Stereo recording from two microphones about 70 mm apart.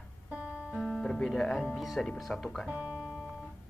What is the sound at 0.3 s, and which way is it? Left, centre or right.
Music, centre.